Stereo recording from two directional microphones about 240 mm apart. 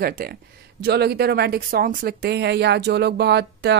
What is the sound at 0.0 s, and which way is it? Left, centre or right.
Speech, right.